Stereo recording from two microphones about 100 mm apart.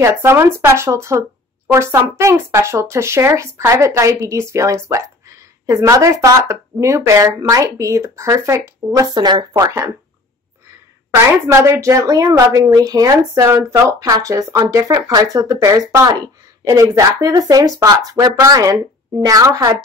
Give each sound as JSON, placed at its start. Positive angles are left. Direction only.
{"t": 0.0, "sound": "speech", "side_deg": -25}
{"t": 11.6, "sound": "a woman's voice", "side_deg": -30}